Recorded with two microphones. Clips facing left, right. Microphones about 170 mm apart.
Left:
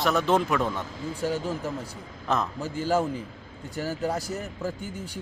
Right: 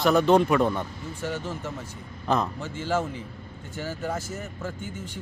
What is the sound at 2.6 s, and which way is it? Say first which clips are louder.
A man's voice: left 2 dB; 40° left (ahead or behind).